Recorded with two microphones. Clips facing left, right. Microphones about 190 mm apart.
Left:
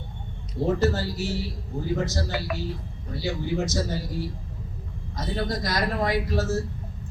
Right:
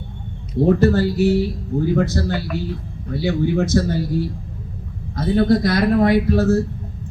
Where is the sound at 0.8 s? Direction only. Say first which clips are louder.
Right 9 dB; 60° right (ahead or behind).